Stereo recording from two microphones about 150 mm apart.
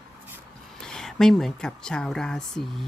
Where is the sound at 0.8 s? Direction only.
5° left (ahead or behind).